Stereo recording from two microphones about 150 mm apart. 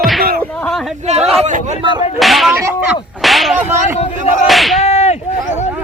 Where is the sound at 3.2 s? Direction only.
Centre (ahead or behind).